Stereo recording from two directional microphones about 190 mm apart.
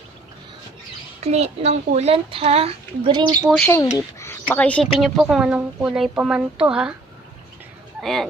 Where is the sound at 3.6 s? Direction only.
15° left (ahead or behind).